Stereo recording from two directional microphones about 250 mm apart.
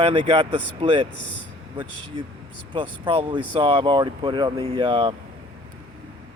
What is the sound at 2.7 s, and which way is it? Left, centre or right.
Speech, centre.